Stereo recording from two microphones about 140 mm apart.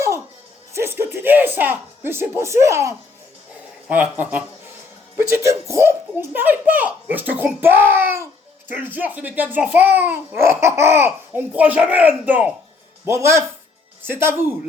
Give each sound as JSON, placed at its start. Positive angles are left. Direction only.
{"t": 0.7, "sound": "speech", "side_deg": -15}
{"t": 3.8, "sound": "a child's voice", "side_deg": -10}